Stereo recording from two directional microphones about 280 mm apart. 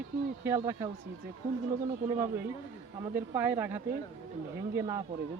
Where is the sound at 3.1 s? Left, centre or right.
Centre.